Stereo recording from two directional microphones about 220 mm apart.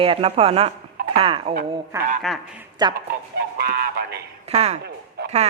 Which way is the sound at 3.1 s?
45° right (ahead or behind).